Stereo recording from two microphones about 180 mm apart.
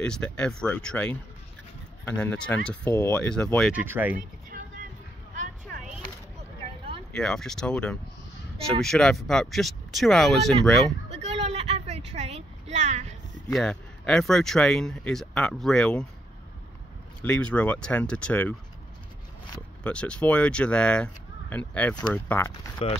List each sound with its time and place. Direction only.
0.0 s speech: 5° left (ahead or behind)
3.7 s speech: 10° right (ahead or behind)
5.7 s a sound: centre (ahead or behind)
7.1 s speech: 5° left (ahead or behind)
11.1 s a sound: 35° right (ahead or behind)
13.5 s speech: centre (ahead or behind)
17.2 s speech: 5° left (ahead or behind)
19.8 s speech: 5° left (ahead or behind)